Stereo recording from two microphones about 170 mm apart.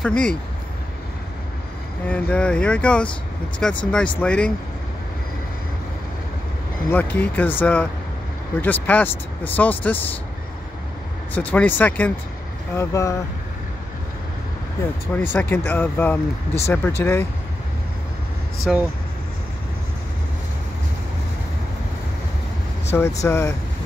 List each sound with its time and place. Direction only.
0.0 s speech: 5° left (ahead or behind)
2.0 s speech: 10° left (ahead or behind)
6.9 s speech: 10° left (ahead or behind)
11.3 s speech: 10° left (ahead or behind)
15.1 s speech: 10° left (ahead or behind)
18.6 s speech: 5° right (ahead or behind)
22.9 s speech: 15° left (ahead or behind)